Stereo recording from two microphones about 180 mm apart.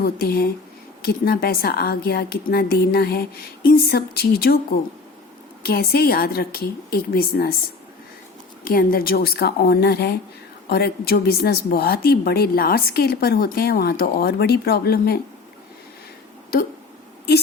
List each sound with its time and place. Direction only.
0.0 s a woman's voice: 60° left (ahead or behind)
8.6 s a woman's voice: 55° left (ahead or behind)